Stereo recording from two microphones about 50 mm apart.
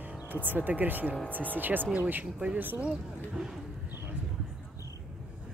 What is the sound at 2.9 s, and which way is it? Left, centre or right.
Speech, centre.